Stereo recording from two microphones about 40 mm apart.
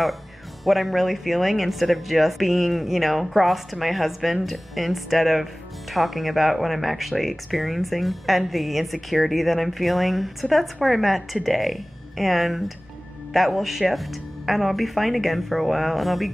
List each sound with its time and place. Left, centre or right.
0.7 s speech: centre